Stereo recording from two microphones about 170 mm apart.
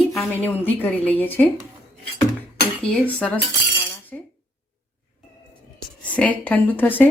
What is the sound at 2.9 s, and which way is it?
Speech, 10° left (ahead or behind).